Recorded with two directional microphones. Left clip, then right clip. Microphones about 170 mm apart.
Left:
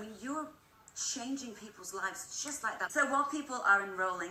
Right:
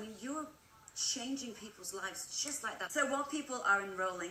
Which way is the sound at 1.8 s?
25° right (ahead or behind).